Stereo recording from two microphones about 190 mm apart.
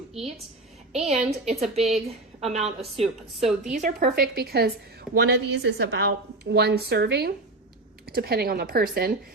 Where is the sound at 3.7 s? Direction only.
45° right (ahead or behind).